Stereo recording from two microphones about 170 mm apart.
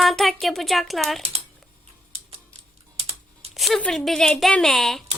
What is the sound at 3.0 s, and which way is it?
Typing, 40° right (ahead or behind).